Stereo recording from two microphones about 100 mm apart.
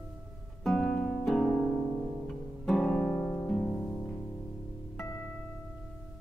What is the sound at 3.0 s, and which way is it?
Harp, 20° left (ahead or behind).